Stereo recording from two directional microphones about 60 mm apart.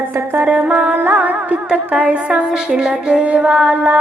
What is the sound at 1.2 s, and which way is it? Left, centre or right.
Music, right.